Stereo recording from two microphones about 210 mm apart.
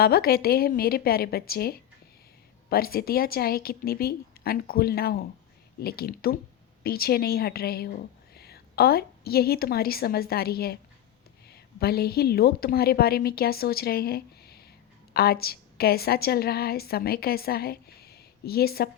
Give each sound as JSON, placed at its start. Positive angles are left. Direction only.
{"t": 0.0, "sound": "a woman's voice", "side_deg": 45}